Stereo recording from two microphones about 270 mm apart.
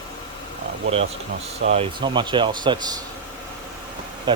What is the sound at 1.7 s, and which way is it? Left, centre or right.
Speech, centre.